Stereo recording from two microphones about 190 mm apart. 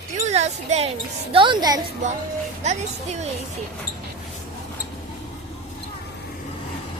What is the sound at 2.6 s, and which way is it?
Speech, 35° right (ahead or behind).